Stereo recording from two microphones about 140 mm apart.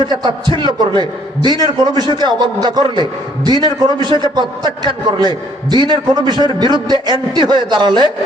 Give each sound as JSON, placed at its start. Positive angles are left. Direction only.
{"t": 0.0, "sound": "a man's voice", "side_deg": -35}